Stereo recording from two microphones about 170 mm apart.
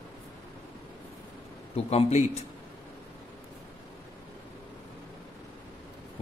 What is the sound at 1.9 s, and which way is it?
Speech, 40° left (ahead or behind).